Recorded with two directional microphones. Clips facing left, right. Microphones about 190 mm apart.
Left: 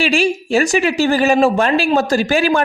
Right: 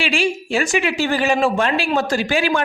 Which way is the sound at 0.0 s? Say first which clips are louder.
Left 4 dB; 40° left (ahead or behind).